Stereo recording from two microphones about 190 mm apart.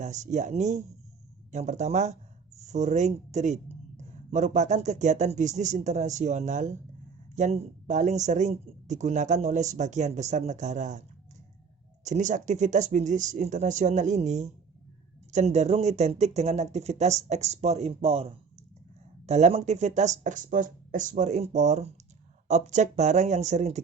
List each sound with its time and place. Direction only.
0.0 s speech: 40° right (ahead or behind)
12.0 s speech: 40° right (ahead or behind)